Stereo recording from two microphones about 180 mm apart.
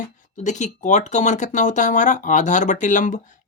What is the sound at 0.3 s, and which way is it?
Speech, 40° left (ahead or behind).